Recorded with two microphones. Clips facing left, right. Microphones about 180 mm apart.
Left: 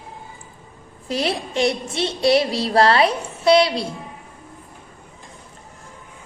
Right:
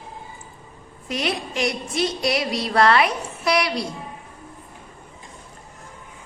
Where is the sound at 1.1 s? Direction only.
30° left (ahead or behind).